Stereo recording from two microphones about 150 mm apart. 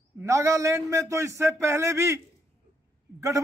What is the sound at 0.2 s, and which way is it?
A man's voice, 20° right (ahead or behind).